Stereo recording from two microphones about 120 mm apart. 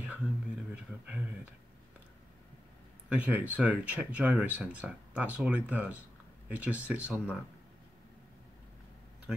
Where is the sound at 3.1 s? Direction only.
15° right (ahead or behind).